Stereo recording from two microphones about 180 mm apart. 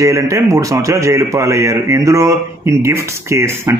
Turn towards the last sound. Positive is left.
turn(degrees=-15)  # may be behind; listen again after turning